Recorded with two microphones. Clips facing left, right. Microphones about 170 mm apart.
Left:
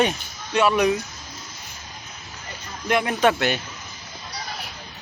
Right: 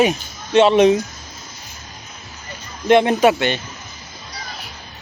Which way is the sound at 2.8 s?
25° right (ahead or behind).